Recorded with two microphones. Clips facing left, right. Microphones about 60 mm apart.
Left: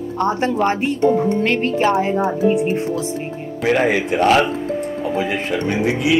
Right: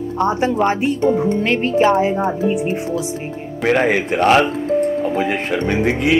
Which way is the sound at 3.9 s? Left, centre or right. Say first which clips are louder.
Right 1 dB; right.